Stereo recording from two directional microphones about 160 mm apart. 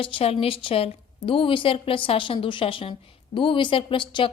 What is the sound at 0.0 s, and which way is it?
A woman's voice, 35° left (ahead or behind).